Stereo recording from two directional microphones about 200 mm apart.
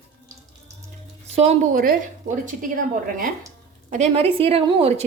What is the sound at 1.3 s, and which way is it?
Speech, 35° right (ahead or behind).